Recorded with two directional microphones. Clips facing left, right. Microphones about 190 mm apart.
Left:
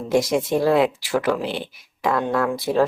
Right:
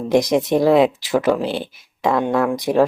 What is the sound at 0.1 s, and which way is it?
Speech, 20° right (ahead or behind).